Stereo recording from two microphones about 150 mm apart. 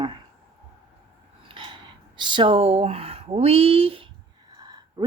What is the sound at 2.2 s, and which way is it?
Speech, 30° right (ahead or behind).